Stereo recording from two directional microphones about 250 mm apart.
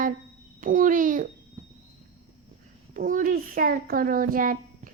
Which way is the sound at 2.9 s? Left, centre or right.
Right.